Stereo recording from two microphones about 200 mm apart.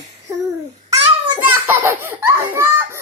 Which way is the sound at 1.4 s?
10° right (ahead or behind).